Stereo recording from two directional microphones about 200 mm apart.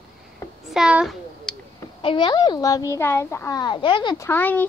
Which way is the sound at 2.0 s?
25° left (ahead or behind).